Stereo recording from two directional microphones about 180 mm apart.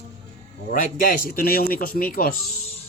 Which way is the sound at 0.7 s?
50° left (ahead or behind).